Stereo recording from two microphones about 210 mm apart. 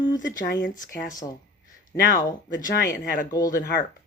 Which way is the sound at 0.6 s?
40° left (ahead or behind).